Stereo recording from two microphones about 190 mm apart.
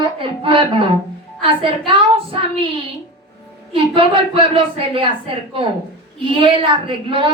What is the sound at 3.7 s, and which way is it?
A woman's voice, 30° right (ahead or behind).